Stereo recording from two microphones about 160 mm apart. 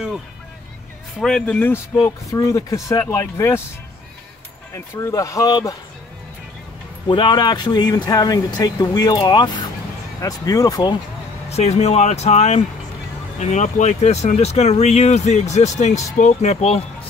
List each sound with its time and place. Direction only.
1.2 s speech: 5° left (ahead or behind)
4.7 s speech: 15° left (ahead or behind)
7.1 s speech: 30° left (ahead or behind)
11.4 s speech: 40° left (ahead or behind)